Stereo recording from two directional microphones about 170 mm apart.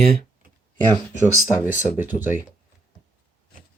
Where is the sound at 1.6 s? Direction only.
10° right (ahead or behind).